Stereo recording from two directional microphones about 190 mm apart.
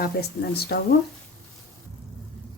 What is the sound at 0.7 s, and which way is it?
Speech, 60° left (ahead or behind).